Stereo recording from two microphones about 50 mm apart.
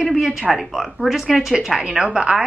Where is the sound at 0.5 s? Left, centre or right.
Centre.